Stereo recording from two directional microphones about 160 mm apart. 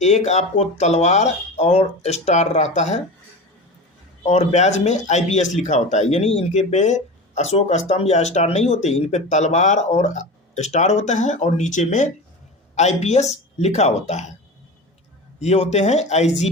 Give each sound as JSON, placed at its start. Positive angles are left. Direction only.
{"t": 0.0, "sound": "speech", "side_deg": 45}
{"t": 4.3, "sound": "speech", "side_deg": 45}
{"t": 15.4, "sound": "speech", "side_deg": 40}